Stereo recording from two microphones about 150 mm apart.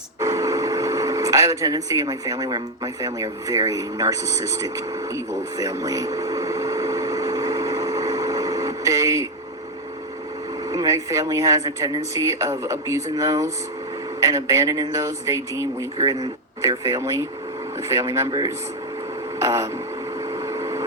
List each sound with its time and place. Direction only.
0.2 s a sound: 20° right (ahead or behind)
10.7 s speech: 20° right (ahead or behind)
20.1 s vehicle: 20° right (ahead or behind)